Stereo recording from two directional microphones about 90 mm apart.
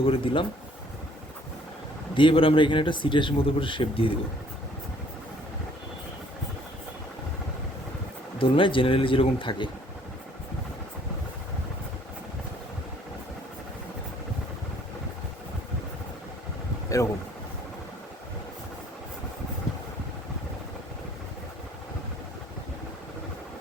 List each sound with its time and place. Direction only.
0.0 s speech: 90° left
2.1 s speech: 70° left (ahead or behind)
8.4 s speech: 75° left (ahead or behind)
16.9 s speech: 35° left (ahead or behind)